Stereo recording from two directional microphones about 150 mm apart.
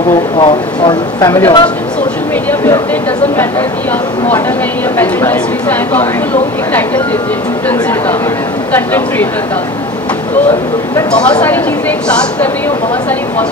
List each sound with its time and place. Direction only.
0.4 s speech: 30° left (ahead or behind)
4.9 s a woman's voice: 15° left (ahead or behind)
8.7 s a woman's voice: 10° left (ahead or behind)
11.1 s a woman's voice: 5° left (ahead or behind)